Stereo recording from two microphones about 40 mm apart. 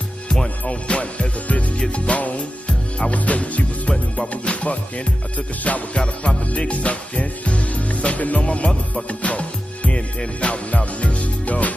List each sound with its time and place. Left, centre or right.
0.7 s music: left
3.0 s speech: left
4.3 s music: left